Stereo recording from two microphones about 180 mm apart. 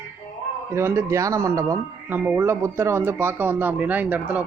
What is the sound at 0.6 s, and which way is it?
Speech, 15° right (ahead or behind).